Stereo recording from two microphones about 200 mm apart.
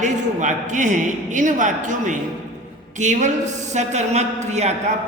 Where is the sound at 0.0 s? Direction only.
35° right (ahead or behind).